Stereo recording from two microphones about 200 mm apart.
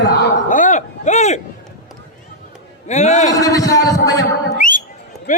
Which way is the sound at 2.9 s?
35° left (ahead or behind).